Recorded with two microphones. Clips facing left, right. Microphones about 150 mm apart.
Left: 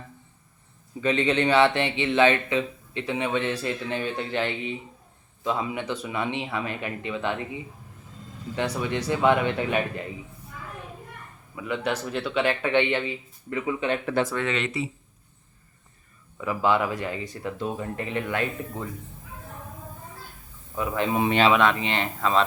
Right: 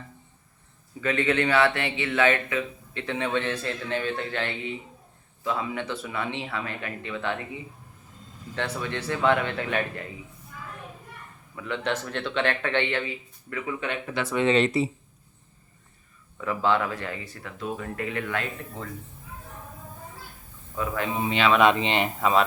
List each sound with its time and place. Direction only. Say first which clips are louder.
1.0 s speech: left 2 dB; 20° left (ahead or behind)
8.5 s speech: left 3 dB; 15° left (ahead or behind)
11.5 s speech: left 1 dB; 10° left (ahead or behind)
14.3 s speech: right 6 dB; 30° right (ahead or behind)
16.4 s speech: left 1 dB; 10° left (ahead or behind)
20.7 s speech: left 2 dB; 20° left (ahead or behind)
21.6 s speech: right 2 dB; 20° right (ahead or behind)